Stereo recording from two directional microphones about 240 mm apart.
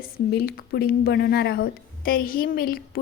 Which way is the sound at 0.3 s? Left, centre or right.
Left.